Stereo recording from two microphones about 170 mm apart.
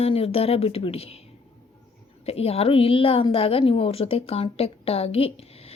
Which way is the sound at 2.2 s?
35° left (ahead or behind).